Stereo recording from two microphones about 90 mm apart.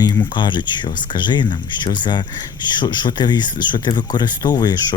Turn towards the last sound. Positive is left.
turn(degrees=50)  # may be behind; listen again after turning